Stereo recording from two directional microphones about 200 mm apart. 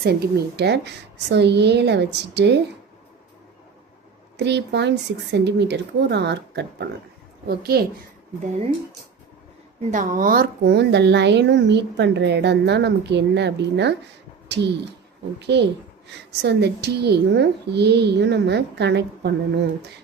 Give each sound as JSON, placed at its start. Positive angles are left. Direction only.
{"t": 0.0, "sound": "a woman's voice", "side_deg": -50}
{"t": 4.4, "sound": "a woman's voice", "side_deg": -60}
{"t": 9.9, "sound": "a woman's voice", "side_deg": -40}